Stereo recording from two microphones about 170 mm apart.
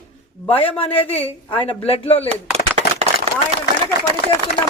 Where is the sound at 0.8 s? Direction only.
35° left (ahead or behind).